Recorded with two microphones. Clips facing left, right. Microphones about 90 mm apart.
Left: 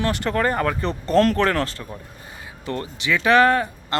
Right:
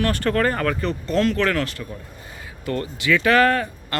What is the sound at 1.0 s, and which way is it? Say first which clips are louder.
Speech: left 4 dB; 45° left (ahead or behind).